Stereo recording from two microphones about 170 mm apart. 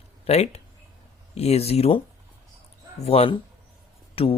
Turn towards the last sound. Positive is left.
turn(degrees=35)  # may be behind; listen again after turning